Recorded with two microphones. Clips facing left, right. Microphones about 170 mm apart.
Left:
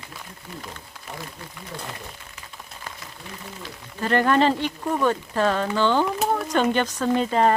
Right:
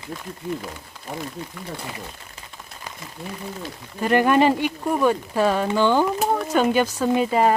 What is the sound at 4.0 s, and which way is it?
Speech, 15° right (ahead or behind).